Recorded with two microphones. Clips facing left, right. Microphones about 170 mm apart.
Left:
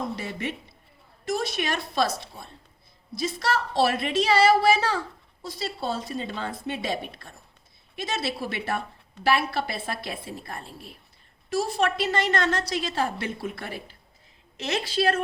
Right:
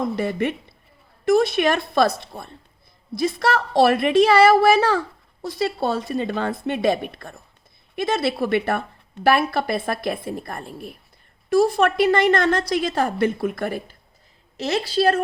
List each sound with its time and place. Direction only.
0.2 s a woman's voice: 55° right (ahead or behind)
14.5 s a woman's voice: 35° right (ahead or behind)